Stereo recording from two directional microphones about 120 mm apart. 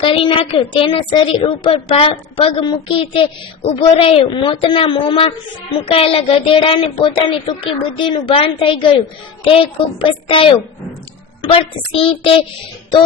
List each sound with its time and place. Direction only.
0.0 s speech: 50° left (ahead or behind)
1.7 s speech: 50° left (ahead or behind)